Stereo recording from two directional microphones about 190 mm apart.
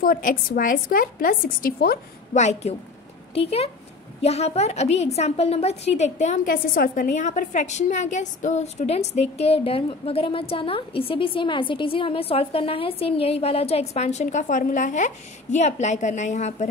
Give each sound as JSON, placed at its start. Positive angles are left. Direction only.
{"t": 0.0, "sound": "a woman's voice", "side_deg": 45}
{"t": 2.3, "sound": "a woman's voice", "side_deg": 40}